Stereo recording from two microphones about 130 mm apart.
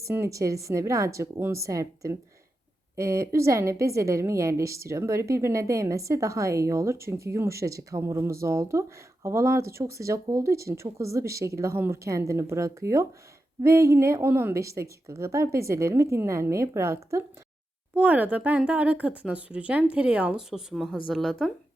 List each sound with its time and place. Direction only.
0.0 s a woman's voice: 20° right (ahead or behind); by 21.5 s centre (ahead or behind)